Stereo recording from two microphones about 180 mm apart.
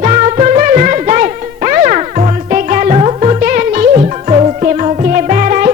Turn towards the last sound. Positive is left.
turn(degrees=-45)  # may be behind; listen again after turning